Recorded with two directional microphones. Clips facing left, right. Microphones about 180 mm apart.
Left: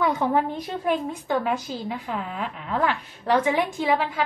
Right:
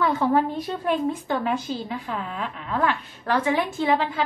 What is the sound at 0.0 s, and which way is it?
A woman's voice, 15° left (ahead or behind).